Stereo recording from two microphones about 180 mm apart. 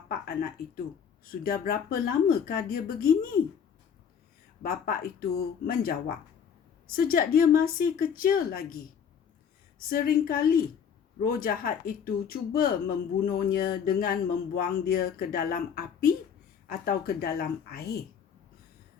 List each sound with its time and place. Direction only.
1.2 s speech: 55° left (ahead or behind)
4.6 s a woman's voice: 55° left (ahead or behind)